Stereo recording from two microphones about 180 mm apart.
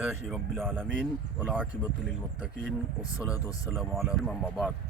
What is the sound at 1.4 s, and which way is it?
Speech, 5° right (ahead or behind).